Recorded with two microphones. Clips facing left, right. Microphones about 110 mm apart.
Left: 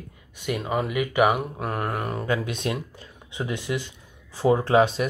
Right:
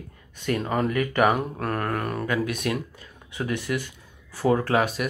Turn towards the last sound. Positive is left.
turn(degrees=25)  # may be behind; listen again after turning